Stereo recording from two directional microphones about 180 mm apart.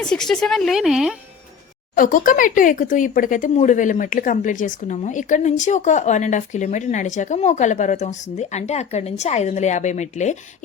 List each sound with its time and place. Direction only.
0.0 s a woman's voice: 5° left (ahead or behind)
2.0 s speech: 50° left (ahead or behind)